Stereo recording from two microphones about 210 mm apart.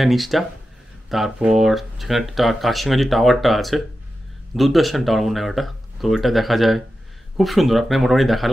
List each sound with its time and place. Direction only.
0.0 s speech: centre (ahead or behind)